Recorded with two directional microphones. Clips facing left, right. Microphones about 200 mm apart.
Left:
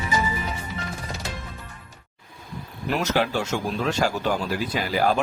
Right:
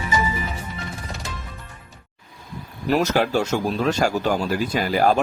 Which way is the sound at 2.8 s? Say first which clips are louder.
Right 4 dB; 40° right (ahead or behind).